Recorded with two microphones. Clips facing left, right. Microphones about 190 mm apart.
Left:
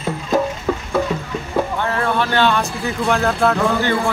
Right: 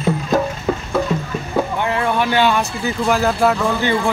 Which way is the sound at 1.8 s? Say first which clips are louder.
Right 1 dB; 15° right (ahead or behind).